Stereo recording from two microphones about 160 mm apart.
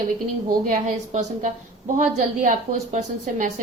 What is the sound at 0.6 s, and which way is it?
A woman's voice, 50° right (ahead or behind).